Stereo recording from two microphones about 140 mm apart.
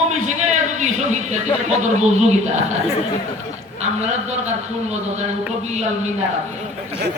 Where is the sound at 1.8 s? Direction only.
55° right (ahead or behind).